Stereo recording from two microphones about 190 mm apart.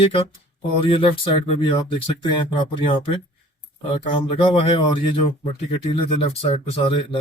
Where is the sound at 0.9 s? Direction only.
30° left (ahead or behind).